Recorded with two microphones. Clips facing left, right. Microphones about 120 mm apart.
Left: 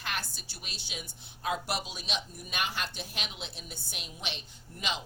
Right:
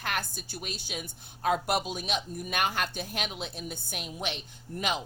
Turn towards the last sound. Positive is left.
turn(degrees=-50)  # may be behind; listen again after turning